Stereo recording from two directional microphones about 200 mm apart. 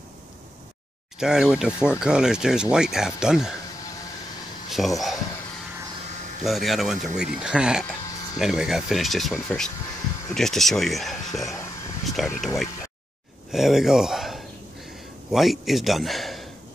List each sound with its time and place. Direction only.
1.2 s speech: 5° right (ahead or behind)
4.6 s speech: centre (ahead or behind)
6.4 s speech: centre (ahead or behind)
13.5 s speech: centre (ahead or behind)